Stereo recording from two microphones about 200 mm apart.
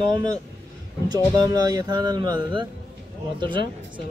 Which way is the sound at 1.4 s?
20° right (ahead or behind).